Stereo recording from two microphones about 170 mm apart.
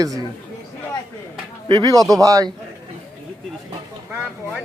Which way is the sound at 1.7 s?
20° right (ahead or behind).